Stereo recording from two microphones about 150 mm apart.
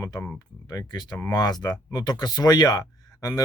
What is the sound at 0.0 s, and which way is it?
Speech, 20° left (ahead or behind).